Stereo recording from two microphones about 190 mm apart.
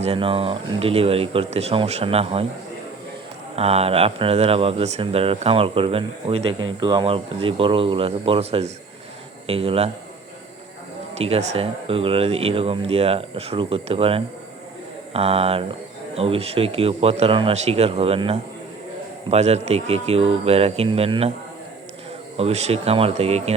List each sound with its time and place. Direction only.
0.0 s speech: 30° right (ahead or behind)
3.5 s speech: 30° right (ahead or behind)
11.2 s speech: 35° right (ahead or behind)
22.4 s speech: 35° right (ahead or behind)